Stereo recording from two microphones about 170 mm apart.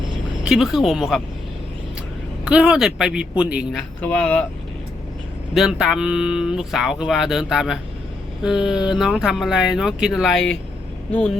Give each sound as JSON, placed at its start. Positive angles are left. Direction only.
{"t": 0.4, "sound": "speech", "side_deg": -5}
{"t": 2.4, "sound": "speech", "side_deg": -5}
{"t": 5.5, "sound": "speech", "side_deg": -5}